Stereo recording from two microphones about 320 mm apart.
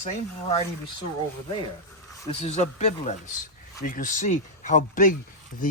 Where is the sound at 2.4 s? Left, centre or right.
Centre.